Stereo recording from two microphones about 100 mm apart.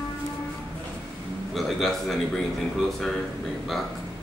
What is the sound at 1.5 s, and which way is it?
Speech, centre (ahead or behind).